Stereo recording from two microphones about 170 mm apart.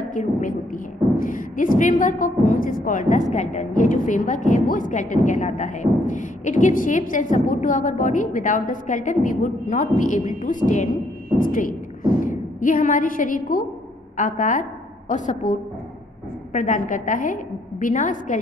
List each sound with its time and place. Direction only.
0.1 s a woman's voice: 50° left (ahead or behind)